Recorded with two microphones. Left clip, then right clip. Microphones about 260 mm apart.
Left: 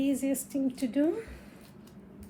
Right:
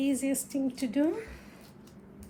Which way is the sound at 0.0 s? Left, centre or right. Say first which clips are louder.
Even; right.